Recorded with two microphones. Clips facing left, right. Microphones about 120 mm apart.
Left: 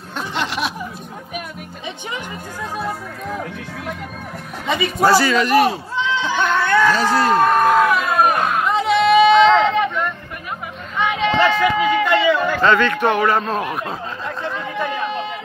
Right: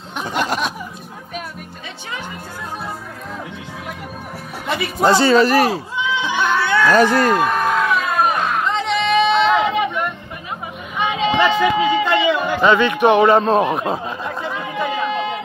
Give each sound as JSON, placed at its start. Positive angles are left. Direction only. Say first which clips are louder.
{"t": 4.6, "sound": "music", "louder": "left 2 dB", "side_deg": 0}
{"t": 5.0, "sound": "speech", "louder": "right 3 dB", "side_deg": -25}
{"t": 5.9, "sound": "goat", "louder": "left 1 dB", "side_deg": -10}
{"t": 6.9, "sound": "speech", "louder": "right 4 dB", "side_deg": -55}
{"t": 7.3, "sound": "music", "louder": "left 4 dB", "side_deg": 0}
{"t": 11.0, "sound": "a sound", "louder": "even", "side_deg": -20}